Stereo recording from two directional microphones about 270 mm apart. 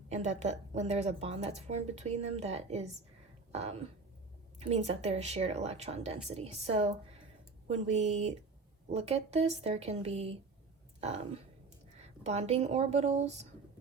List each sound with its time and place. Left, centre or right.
0.1 s speech: right
11.9 s speech: right